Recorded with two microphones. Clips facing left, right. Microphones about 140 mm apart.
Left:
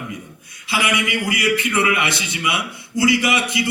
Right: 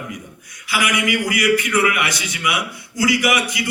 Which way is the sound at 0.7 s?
25° left (ahead or behind).